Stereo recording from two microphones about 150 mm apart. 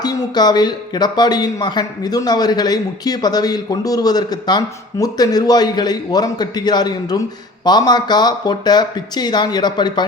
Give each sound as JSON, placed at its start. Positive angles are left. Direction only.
{"t": 0.0, "sound": "speech", "side_deg": 25}